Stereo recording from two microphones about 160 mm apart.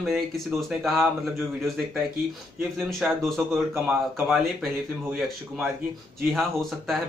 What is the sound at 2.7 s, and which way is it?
Speech, centre (ahead or behind).